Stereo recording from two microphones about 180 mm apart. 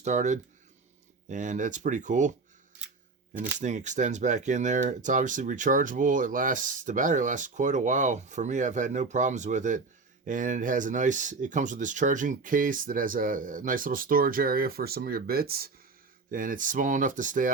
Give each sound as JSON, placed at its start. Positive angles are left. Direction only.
{"t": 0.0, "sound": "speech", "side_deg": -40}
{"t": 3.6, "sound": "speech", "side_deg": -40}